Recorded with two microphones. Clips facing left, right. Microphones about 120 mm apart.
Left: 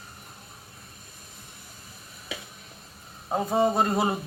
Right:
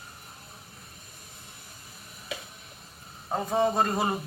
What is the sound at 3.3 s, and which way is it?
Speech, 10° left (ahead or behind).